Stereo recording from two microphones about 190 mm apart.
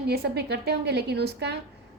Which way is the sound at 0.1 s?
55° right (ahead or behind).